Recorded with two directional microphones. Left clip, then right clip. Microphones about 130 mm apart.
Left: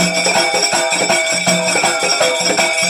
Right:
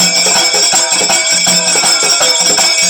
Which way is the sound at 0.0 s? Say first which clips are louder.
Right 3 dB; 25° left (ahead or behind).